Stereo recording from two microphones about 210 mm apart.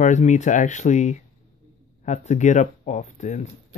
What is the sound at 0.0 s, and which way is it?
Speech, 35° left (ahead or behind).